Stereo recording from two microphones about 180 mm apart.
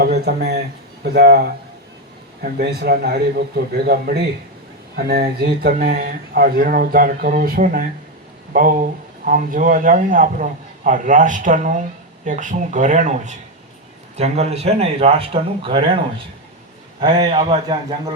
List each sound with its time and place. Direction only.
0.0 s speech: 60° right (ahead or behind)
9.2 s a man's voice: 50° right (ahead or behind); by 18.1 s 25° right (ahead or behind)